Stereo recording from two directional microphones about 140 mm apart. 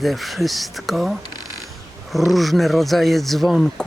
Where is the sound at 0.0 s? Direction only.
Centre (ahead or behind).